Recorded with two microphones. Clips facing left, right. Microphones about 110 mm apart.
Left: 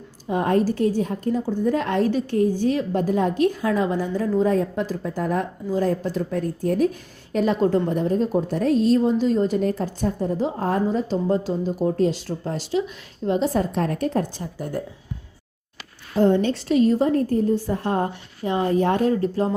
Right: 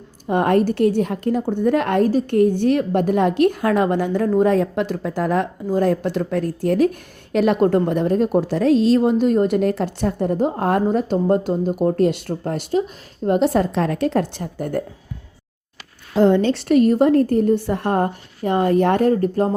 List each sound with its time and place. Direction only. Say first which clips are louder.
0.3 s a woman's voice: right 4 dB; 65° right (ahead or behind); by 5.5 s 90° right
5.8 s a woman's voice: right 4 dB; 70° right (ahead or behind)
7.3 s a woman's voice: right 4 dB; 65° right (ahead or behind)
16.1 s a woman's voice: right 3 dB; 90° right; by 19.1 s 60° right (ahead or behind)
19.1 s speech: right 3 dB; 50° right (ahead or behind)